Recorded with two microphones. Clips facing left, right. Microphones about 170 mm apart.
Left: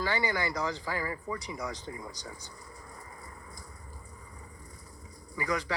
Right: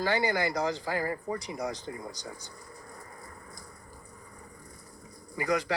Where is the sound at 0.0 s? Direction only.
40° right (ahead or behind).